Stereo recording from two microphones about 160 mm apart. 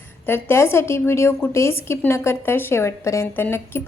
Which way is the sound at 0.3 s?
15° left (ahead or behind).